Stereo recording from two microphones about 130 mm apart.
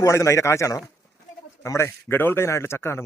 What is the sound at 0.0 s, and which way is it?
A man's voice, 20° left (ahead or behind).